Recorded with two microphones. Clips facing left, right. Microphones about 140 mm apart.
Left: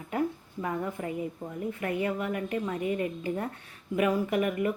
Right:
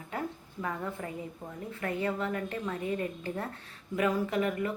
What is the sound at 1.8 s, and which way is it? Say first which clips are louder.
Speech: left 1 dB; 15° left (ahead or behind).